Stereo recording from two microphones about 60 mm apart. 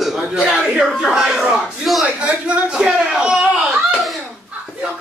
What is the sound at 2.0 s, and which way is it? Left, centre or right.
A man's voice, centre.